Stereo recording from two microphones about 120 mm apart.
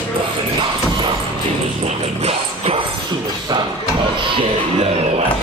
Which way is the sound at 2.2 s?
55° right (ahead or behind).